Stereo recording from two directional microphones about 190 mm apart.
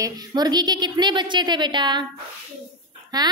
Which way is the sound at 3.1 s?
20° right (ahead or behind).